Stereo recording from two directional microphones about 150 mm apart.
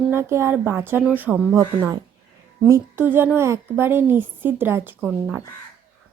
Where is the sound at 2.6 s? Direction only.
15° right (ahead or behind).